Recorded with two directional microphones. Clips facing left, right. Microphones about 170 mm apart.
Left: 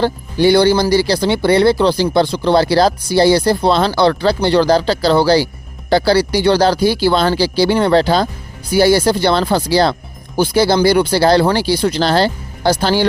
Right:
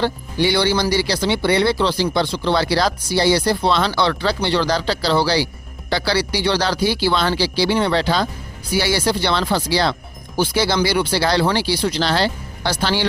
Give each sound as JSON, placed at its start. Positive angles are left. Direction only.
{"t": 0.0, "sound": "speech", "side_deg": 45}